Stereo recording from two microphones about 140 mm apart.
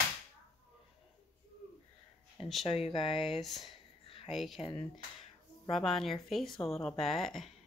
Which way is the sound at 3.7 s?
40° left (ahead or behind).